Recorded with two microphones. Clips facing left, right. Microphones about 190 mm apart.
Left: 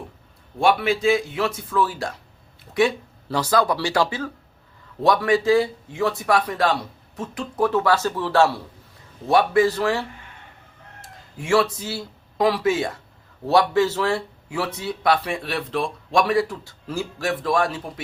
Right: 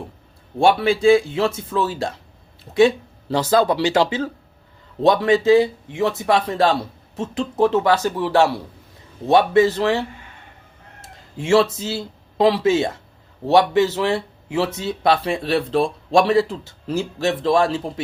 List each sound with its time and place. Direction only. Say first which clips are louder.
0.6 s speech: right 4 dB; 30° right (ahead or behind)
11.3 s speech: right 4 dB; 25° right (ahead or behind)